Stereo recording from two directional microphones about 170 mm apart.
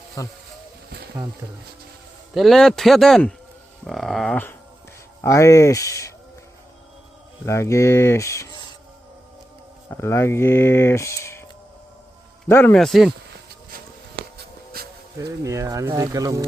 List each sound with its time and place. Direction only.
0.2 s speech: 20° left (ahead or behind)
2.3 s a man's voice: centre (ahead or behind)
5.2 s speech: 15° left (ahead or behind)
7.4 s speech: 15° left (ahead or behind)
9.9 s speech: 15° left (ahead or behind)
12.5 s a man's voice: 15° left (ahead or behind)
14.3 s a sound: 65° right (ahead or behind)
15.4 s speech: 20° right (ahead or behind)